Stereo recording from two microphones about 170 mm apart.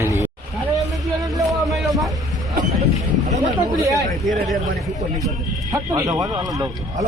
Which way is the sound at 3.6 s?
20° right (ahead or behind).